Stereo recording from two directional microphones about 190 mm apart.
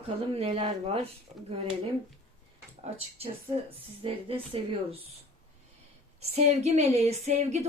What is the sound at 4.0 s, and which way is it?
Speech, 30° right (ahead or behind).